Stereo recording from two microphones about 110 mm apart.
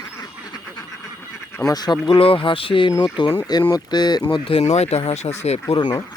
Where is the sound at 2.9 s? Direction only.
40° left (ahead or behind); by 5.3 s 80° left.